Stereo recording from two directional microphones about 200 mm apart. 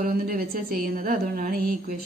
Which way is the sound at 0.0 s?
45° right (ahead or behind).